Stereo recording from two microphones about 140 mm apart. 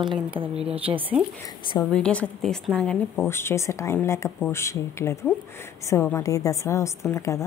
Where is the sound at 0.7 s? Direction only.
40° right (ahead or behind).